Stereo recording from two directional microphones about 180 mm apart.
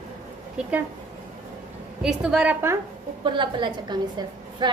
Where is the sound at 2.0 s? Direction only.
5° right (ahead or behind).